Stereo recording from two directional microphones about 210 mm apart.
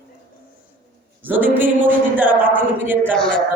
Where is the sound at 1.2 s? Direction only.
10° right (ahead or behind).